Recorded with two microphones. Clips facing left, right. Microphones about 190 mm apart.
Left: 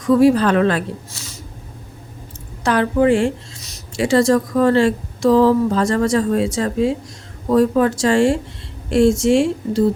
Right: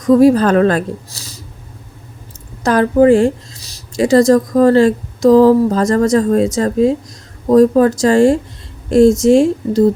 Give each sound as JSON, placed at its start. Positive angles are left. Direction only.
{"t": 0.0, "sound": "speech", "side_deg": -40}
{"t": 2.6, "sound": "speech", "side_deg": -40}